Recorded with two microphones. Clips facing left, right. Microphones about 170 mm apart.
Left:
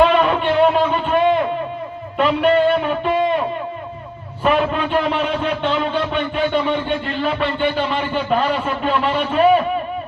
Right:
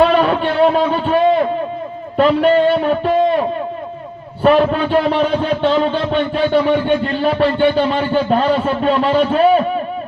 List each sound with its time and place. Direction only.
0.0 s a sound: 35° right (ahead or behind)
2.1 s a man's voice: 35° right (ahead or behind)
4.4 s speech: 35° right (ahead or behind)